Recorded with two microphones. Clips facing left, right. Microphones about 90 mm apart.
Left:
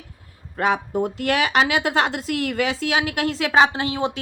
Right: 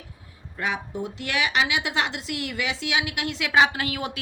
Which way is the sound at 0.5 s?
45° left (ahead or behind).